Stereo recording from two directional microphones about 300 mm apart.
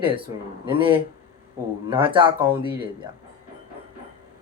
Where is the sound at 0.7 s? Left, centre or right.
Centre.